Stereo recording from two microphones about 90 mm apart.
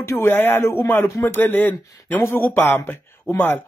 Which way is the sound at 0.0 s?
30° left (ahead or behind).